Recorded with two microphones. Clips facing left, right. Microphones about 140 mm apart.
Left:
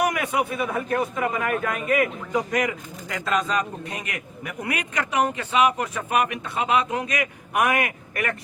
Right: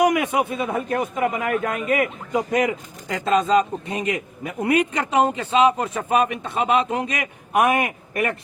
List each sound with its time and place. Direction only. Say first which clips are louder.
0.0 s speech: right 4 dB; 20° right (ahead or behind)